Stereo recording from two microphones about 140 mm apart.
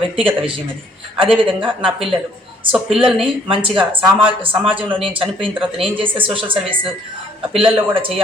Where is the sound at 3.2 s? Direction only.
40° right (ahead or behind).